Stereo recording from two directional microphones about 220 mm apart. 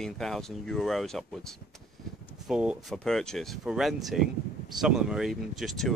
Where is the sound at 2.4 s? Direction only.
5° right (ahead or behind).